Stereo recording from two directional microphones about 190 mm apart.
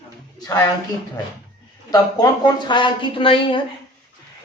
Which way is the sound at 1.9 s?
20° left (ahead or behind).